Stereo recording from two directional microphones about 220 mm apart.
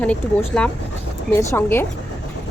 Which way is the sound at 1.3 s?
10° left (ahead or behind).